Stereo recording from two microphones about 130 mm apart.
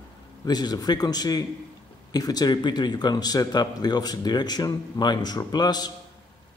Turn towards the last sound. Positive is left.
turn(degrees=30)  # may be behind; listen again after turning